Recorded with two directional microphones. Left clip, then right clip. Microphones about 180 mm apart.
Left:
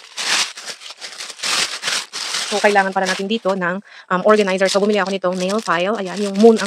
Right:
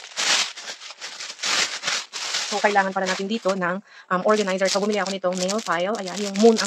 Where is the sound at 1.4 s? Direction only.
60° left (ahead or behind).